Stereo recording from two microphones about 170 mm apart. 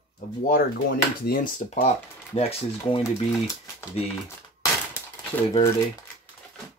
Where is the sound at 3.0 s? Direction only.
20° left (ahead or behind).